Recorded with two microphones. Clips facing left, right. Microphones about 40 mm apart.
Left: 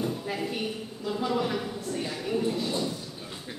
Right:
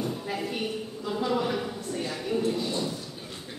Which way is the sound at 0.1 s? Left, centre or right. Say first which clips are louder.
Even; centre.